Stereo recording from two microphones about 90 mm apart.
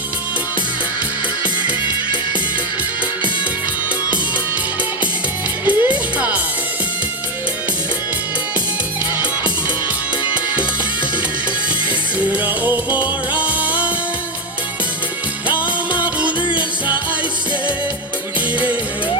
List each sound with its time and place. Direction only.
5.6 s music: 20° right (ahead or behind)
11.9 s music: 20° right (ahead or behind)
15.4 s music: 15° right (ahead or behind)